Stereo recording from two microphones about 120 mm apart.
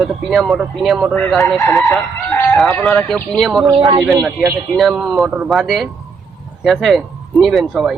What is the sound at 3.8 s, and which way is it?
Speech, 35° right (ahead or behind).